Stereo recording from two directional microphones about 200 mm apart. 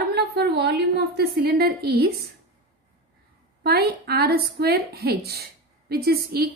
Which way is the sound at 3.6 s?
55° right (ahead or behind).